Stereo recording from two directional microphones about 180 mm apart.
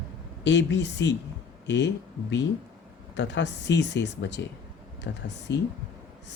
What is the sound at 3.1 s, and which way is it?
Speech, 75° left (ahead or behind).